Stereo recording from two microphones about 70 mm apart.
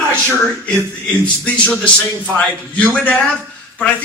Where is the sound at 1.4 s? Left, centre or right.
Centre.